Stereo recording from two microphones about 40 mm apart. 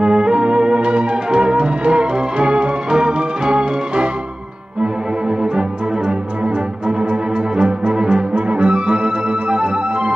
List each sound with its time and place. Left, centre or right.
0.0 s music: centre
6.1 s music: right